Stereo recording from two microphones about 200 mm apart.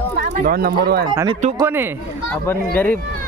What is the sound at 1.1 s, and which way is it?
Speech, 20° right (ahead or behind).